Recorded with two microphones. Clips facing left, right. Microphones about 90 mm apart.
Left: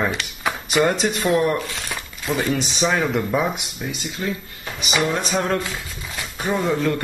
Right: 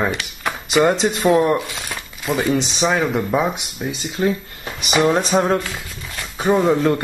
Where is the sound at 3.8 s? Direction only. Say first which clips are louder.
Right 4 dB; 25° right (ahead or behind).